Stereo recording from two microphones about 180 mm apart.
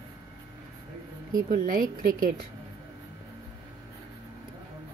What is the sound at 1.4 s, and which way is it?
A woman's voice, 50° right (ahead or behind).